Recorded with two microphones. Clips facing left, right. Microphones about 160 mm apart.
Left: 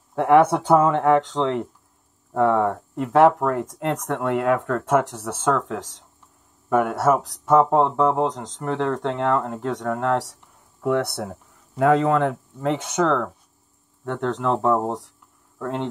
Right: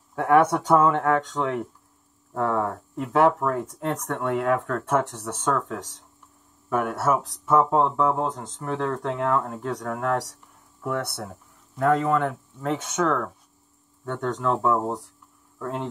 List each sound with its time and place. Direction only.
0.7 s speech: 90° left
10.8 s speech: 70° left (ahead or behind)
11.7 s speech: 90° left